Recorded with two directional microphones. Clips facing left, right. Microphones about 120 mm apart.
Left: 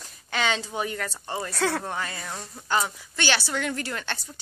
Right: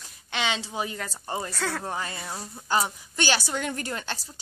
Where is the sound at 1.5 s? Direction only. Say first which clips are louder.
Left 9 dB; 5° left (ahead or behind).